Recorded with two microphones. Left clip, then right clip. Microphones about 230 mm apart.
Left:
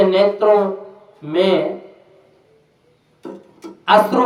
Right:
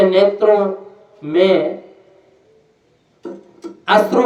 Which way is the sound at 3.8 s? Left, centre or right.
Centre.